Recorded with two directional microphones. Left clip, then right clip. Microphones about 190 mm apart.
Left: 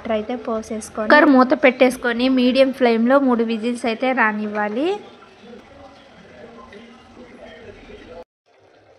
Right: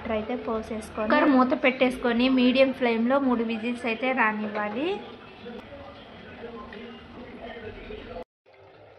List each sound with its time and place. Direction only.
0.1 s speech: 25° left (ahead or behind)
1.0 s a woman's voice: 40° left (ahead or behind)